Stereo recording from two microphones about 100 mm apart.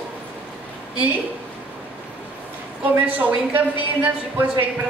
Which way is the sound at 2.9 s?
15° right (ahead or behind).